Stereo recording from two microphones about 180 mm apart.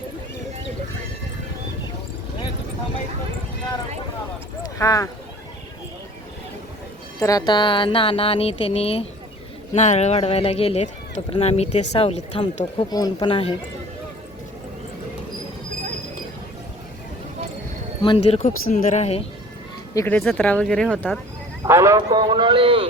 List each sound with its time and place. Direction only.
4.6 s clip-clop: 20° left (ahead or behind)
7.2 s speech: 20° left (ahead or behind); by 12.6 s 35° left (ahead or behind)
12.9 s speech: 20° left (ahead or behind)
18.0 s speech: 30° left (ahead or behind)
19.9 s speech: 15° left (ahead or behind)
21.6 s a man's voice: 15° right (ahead or behind)